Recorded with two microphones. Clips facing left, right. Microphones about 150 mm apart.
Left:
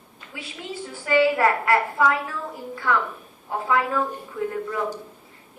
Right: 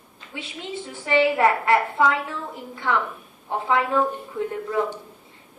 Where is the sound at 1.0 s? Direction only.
25° right (ahead or behind).